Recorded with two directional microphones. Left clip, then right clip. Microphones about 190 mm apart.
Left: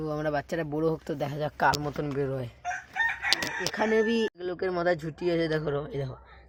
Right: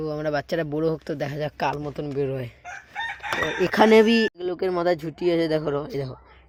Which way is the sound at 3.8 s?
40° right (ahead or behind).